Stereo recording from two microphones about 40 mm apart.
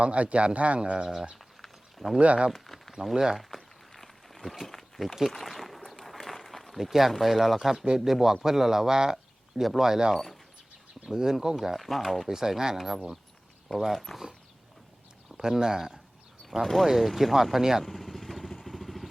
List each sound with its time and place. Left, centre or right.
0.0 s speech: right
2.1 s speech: right
2.5 s speech: centre
3.3 s a sound: centre
7.9 s speech: centre
11.6 s speech: centre
12.3 s speech: centre
15.4 s speech: centre
16.8 s speech: centre
17.8 s vehicle: centre